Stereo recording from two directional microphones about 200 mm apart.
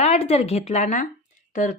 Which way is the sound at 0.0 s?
30° left (ahead or behind).